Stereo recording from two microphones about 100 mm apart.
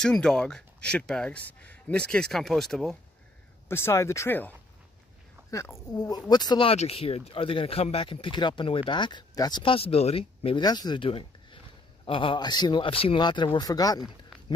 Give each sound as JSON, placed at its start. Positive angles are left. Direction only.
{"t": 0.0, "sound": "speech", "side_deg": 5}
{"t": 3.6, "sound": "speech", "side_deg": 25}
{"t": 5.5, "sound": "speech", "side_deg": 30}
{"t": 5.9, "sound": "speech", "side_deg": 40}
{"t": 6.6, "sound": "speech", "side_deg": 80}
{"t": 10.6, "sound": "a man's voice", "side_deg": 40}
{"t": 11.1, "sound": "a sound", "side_deg": 60}
{"t": 12.1, "sound": "a man's voice", "side_deg": 60}
{"t": 12.8, "sound": "speech", "side_deg": 65}
{"t": 13.2, "sound": "a man's voice", "side_deg": 50}
{"t": 13.6, "sound": "speech", "side_deg": 40}